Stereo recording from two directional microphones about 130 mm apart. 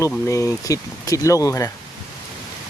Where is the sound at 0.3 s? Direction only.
25° left (ahead or behind).